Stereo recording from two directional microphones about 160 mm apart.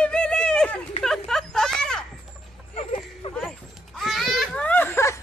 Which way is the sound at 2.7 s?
45° left (ahead or behind).